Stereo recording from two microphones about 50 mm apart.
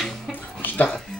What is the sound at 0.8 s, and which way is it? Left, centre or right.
Music, centre.